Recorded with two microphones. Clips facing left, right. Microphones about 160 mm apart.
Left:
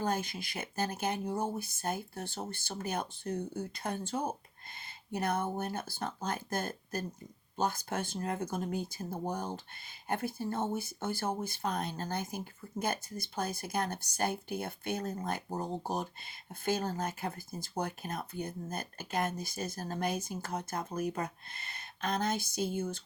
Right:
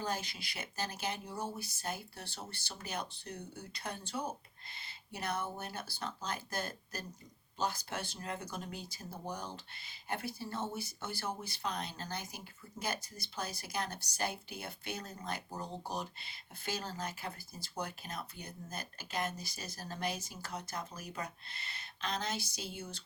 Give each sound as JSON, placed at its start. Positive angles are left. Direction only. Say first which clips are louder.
{"t": 0.0, "sound": "speech", "louder": "left 5 dB", "side_deg": 50}